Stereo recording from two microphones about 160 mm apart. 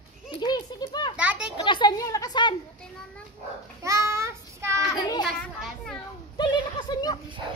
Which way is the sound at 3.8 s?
20° right (ahead or behind).